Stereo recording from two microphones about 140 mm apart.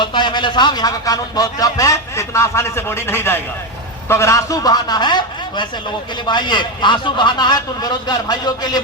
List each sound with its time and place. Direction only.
0.0 s a man's voice: 35° left (ahead or behind)